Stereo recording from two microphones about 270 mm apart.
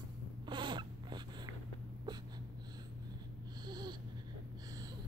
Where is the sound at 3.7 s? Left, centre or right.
Centre.